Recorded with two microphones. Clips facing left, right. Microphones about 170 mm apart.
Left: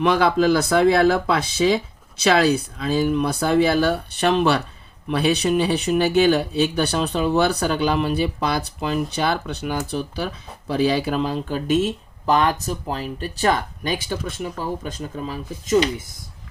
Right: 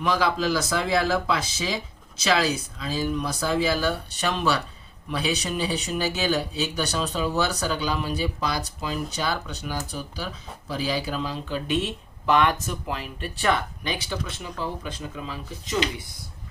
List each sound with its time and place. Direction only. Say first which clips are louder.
0.0 s speech: left 6 dB; 60° left (ahead or behind); by 16.0 s 45° left (ahead or behind)